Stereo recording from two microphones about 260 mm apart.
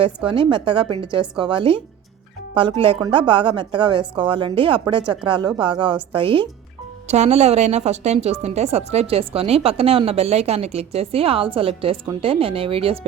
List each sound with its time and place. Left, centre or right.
0.0 s a woman's voice: centre